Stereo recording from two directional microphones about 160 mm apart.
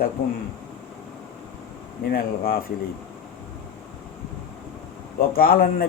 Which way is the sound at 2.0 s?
65° left (ahead or behind).